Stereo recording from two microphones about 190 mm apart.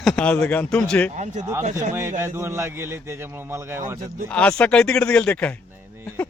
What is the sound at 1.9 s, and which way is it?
Speech, 15° right (ahead or behind).